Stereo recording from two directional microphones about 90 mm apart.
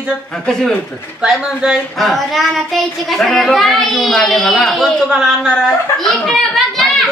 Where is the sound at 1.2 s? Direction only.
10° right (ahead or behind).